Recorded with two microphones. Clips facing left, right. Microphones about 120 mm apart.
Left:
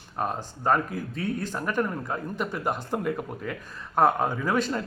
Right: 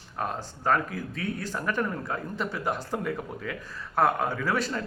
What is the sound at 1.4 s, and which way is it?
Speech, 15° left (ahead or behind).